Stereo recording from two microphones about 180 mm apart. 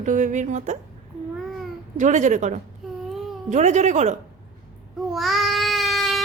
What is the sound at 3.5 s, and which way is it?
Speech, 40° right (ahead or behind).